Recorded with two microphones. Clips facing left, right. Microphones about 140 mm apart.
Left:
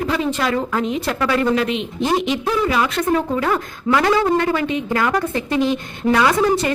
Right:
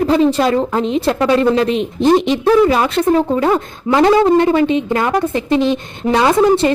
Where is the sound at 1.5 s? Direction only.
35° right (ahead or behind).